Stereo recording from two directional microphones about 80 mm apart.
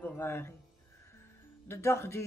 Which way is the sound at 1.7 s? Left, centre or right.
Left.